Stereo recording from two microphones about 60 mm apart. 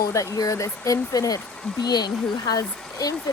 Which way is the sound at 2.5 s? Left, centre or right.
Left.